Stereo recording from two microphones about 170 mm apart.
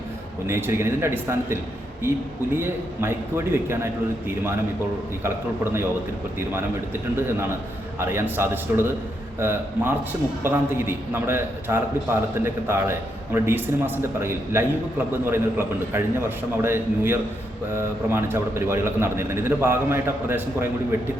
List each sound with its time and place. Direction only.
0.4 s a man's voice: 15° right (ahead or behind)
2.6 s a man's voice: 15° right (ahead or behind)
6.5 s a man's voice: 15° right (ahead or behind)